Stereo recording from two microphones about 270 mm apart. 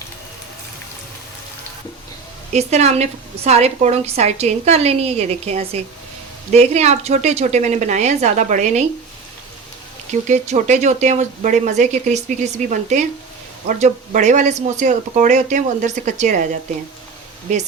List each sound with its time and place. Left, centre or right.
2.5 s a woman's voice: right
10.2 s a woman's voice: right
17.5 s a woman's voice: right